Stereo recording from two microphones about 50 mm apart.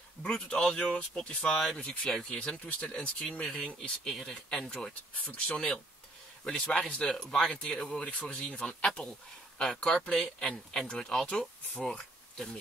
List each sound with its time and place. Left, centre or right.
0.2 s speech: centre
0.7 s a man's voice: left
8.1 s speech: left